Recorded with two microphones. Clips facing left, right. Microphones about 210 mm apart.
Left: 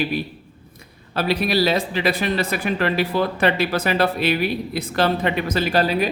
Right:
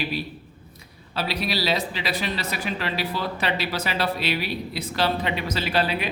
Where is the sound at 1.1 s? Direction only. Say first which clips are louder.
Left 7 dB; 50° left (ahead or behind).